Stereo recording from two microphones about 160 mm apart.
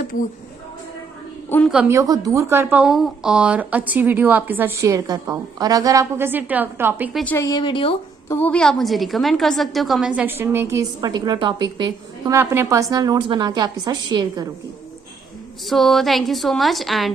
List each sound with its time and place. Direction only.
1.5 s a woman's voice: 10° left (ahead or behind)
1.9 s a woman's voice: 20° right (ahead or behind)
7.3 s speech: 20° left (ahead or behind)
7.6 s speech: 30° left (ahead or behind)
8.3 s a woman's voice: 10° left (ahead or behind); by 14.4 s 25° right (ahead or behind)
15.6 s a woman's voice: centre (ahead or behind)